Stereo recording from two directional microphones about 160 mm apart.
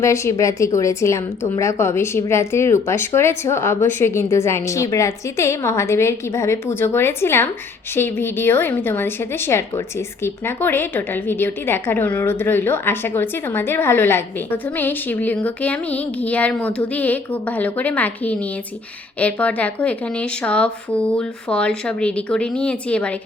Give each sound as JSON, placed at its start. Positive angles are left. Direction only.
{"t": 0.0, "sound": "a woman's voice", "side_deg": 20}